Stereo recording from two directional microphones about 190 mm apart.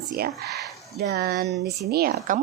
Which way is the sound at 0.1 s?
55° right (ahead or behind).